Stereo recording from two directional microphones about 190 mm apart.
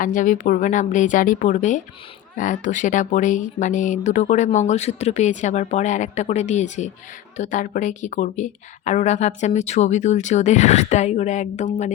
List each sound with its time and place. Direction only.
0.0 s a woman's voice: 45° left (ahead or behind)